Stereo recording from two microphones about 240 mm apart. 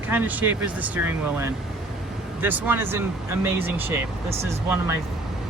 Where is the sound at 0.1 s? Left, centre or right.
Centre.